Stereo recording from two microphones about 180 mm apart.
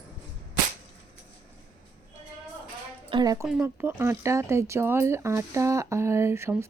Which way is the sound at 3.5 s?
10° right (ahead or behind).